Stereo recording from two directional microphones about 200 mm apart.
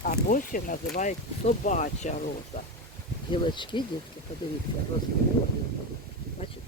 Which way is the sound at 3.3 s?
25° left (ahead or behind).